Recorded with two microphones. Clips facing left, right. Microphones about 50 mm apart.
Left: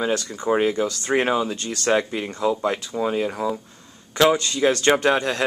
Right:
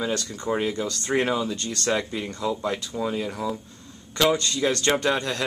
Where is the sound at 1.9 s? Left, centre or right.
Left.